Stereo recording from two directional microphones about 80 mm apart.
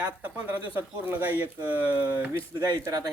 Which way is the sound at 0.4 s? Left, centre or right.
Right.